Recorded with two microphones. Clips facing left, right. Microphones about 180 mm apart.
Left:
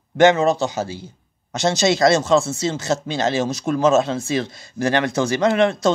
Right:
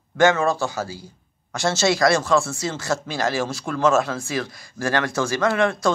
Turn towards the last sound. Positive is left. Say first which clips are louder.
# left 3 dB
turn(degrees=20)  # may be behind; listen again after turning